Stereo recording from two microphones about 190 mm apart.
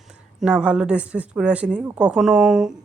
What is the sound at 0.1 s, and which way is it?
A woman's voice, 5° right (ahead or behind).